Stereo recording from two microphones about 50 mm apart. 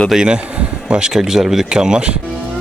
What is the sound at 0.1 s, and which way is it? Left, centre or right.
Speech, centre.